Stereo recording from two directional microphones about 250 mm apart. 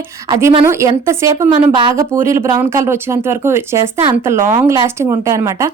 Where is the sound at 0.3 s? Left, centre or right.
Centre.